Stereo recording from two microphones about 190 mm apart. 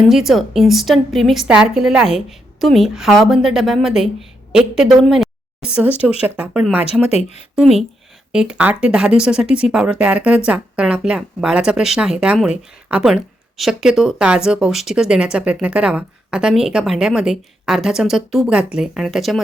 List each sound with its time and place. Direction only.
0.1 s speech: centre (ahead or behind)
7.1 s speech: 35° left (ahead or behind)
7.5 s speech: centre (ahead or behind)